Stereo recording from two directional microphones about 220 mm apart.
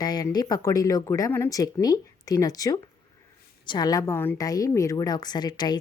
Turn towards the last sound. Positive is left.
turn(degrees=20)  # may be behind; listen again after turning